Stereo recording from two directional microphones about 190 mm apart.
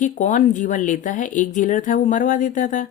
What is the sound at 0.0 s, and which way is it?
Speech, 40° left (ahead or behind).